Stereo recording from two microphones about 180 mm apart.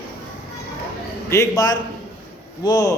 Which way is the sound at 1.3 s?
20° left (ahead or behind).